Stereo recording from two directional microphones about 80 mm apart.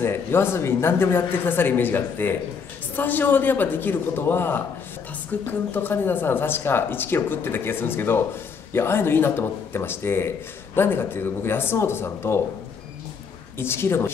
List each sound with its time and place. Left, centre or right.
0.0 s speech: left
13.6 s speech: left